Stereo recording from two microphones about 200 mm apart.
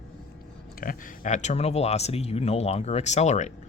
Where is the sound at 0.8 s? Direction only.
40° left (ahead or behind).